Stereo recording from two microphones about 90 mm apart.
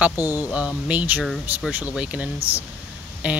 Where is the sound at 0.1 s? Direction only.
40° left (ahead or behind).